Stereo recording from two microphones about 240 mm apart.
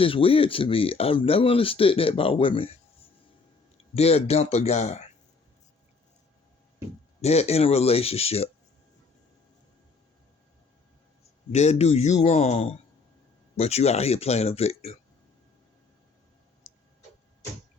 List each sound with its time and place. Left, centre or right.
0.0 s speech: left
3.9 s speech: left
7.2 s speech: left
11.5 s speech: left